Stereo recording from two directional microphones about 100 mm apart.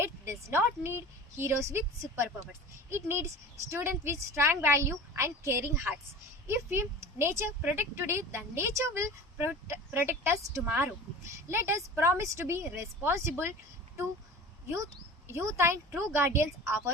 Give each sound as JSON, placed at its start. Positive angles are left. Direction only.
{"t": 0.0, "sound": "a woman's voice", "side_deg": -25}
{"t": 15.3, "sound": "speech", "side_deg": -30}